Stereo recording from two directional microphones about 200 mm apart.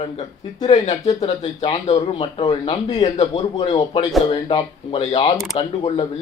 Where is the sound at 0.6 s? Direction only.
35° left (ahead or behind).